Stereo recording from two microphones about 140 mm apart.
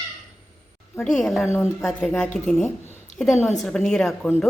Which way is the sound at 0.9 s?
5° left (ahead or behind).